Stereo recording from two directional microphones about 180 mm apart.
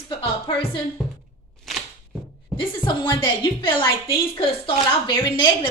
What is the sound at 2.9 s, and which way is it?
A woman's voice, 25° left (ahead or behind).